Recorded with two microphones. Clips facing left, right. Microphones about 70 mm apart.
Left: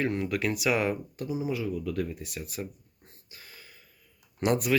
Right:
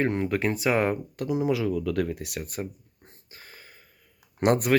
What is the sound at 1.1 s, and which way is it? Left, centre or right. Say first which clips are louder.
Speech: right 6 dB; right.